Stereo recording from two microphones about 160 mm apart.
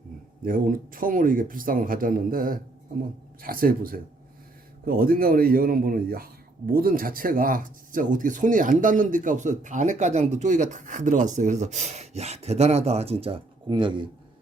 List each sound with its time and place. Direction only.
0.4 s a man's voice: 60° right (ahead or behind); by 14.1 s 30° right (ahead or behind)